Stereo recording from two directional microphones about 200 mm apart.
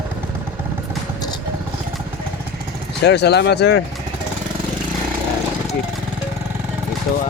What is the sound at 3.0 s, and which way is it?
Speech, 55° left (ahead or behind).